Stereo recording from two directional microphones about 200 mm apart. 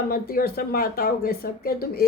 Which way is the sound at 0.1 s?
45° left (ahead or behind).